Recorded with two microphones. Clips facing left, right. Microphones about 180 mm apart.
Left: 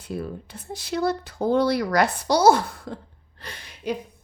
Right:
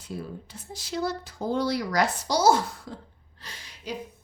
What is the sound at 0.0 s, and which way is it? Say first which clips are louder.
A woman's voice: left 5 dB; 60° left (ahead or behind).